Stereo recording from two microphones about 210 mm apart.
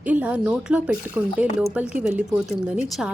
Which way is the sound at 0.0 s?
5° right (ahead or behind).